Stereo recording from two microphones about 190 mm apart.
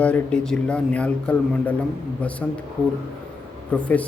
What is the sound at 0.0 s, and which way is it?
Speech, 5° left (ahead or behind).